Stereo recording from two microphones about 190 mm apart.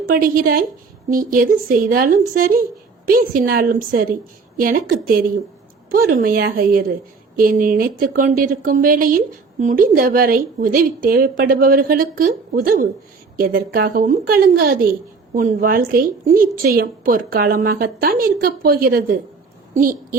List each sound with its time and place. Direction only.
0.0 s a woman's voice: 50° right (ahead or behind)